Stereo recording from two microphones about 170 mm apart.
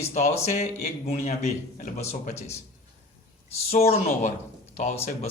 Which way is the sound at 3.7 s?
40° left (ahead or behind).